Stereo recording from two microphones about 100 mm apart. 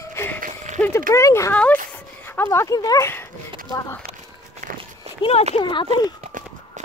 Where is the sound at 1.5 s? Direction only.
15° left (ahead or behind).